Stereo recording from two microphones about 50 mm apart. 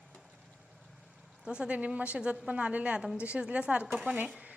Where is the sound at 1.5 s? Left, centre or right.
Right.